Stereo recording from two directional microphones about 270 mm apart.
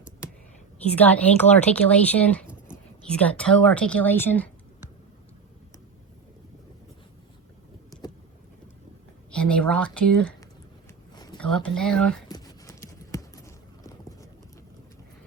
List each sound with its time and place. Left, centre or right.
0.9 s speech: centre
9.3 s speech: centre
11.1 s a sound: centre
11.3 s speech: centre
12.3 s clip-clop: centre